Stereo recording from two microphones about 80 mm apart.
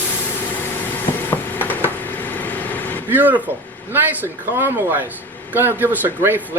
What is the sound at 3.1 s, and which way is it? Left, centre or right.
Speech, right.